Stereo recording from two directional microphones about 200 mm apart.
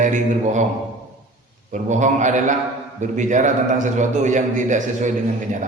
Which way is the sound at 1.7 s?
35° right (ahead or behind).